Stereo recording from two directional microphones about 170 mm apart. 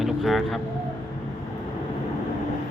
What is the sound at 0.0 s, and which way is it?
Speech, centre (ahead or behind).